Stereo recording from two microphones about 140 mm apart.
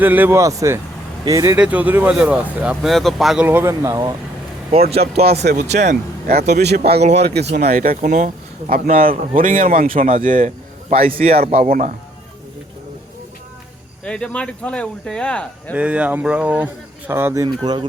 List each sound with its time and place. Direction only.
0.0 s speech: 15° right (ahead or behind)
1.5 s speech: 10° right (ahead or behind)
3.4 s speech: 15° right (ahead or behind)
4.7 s speech: 45° right (ahead or behind)
5.2 s speech: 55° right (ahead or behind)
7.0 s speech: 50° right (ahead or behind)
7.3 s speech: 90° right; by 9.0 s 50° right (ahead or behind)
9.0 s speech: 75° right (ahead or behind); by 11.4 s 45° right (ahead or behind)
11.5 s speech: 85° right
14.0 s speech: 5° left (ahead or behind)
15.7 s speech: 10° right (ahead or behind)
17.6 s speech: 35° right (ahead or behind)